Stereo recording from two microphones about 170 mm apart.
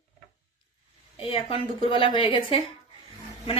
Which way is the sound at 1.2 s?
30° left (ahead or behind).